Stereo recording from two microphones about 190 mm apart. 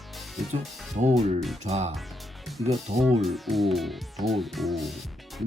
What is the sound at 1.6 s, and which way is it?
Speech, 35° right (ahead or behind).